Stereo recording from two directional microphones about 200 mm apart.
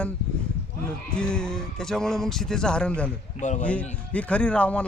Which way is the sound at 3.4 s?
40° left (ahead or behind).